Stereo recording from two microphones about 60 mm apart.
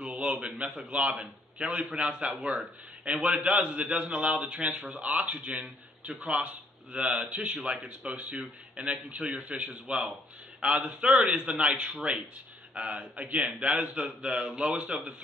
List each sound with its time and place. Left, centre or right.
0.0 s a man's voice: centre